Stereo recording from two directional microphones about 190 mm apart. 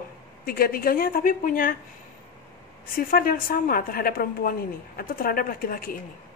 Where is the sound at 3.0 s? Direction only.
50° left (ahead or behind).